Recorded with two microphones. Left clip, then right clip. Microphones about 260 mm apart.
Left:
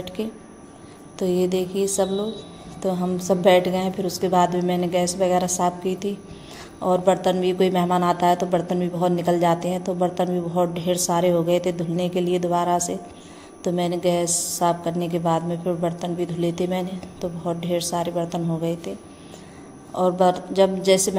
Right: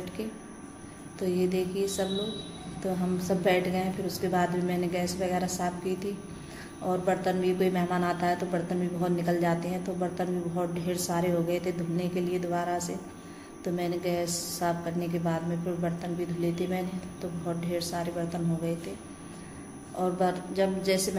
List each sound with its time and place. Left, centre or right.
0.2 s a woman's voice: left
20.0 s a woman's voice: left